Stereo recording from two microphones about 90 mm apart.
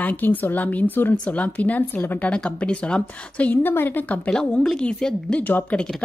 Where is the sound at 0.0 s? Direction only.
20° left (ahead or behind).